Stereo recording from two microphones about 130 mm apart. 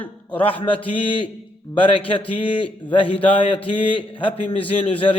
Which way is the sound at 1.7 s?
40° left (ahead or behind).